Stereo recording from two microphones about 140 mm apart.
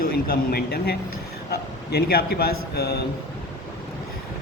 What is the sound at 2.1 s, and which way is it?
Speech, 90° left.